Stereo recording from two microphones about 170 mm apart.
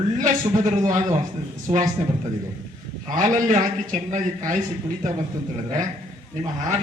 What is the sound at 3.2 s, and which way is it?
A man's voice, 50° right (ahead or behind).